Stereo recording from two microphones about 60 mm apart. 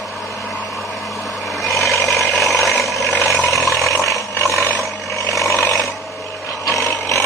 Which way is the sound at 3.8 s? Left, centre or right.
Left.